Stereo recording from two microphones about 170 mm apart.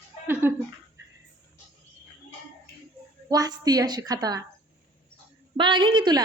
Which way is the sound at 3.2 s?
20° right (ahead or behind).